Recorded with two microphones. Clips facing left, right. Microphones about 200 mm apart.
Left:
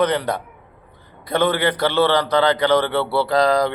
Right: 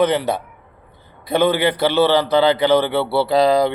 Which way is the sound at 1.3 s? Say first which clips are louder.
Right 2 dB; 10° right (ahead or behind).